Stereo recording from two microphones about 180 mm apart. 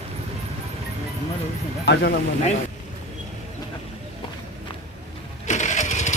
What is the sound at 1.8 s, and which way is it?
Speech, 65° left (ahead or behind).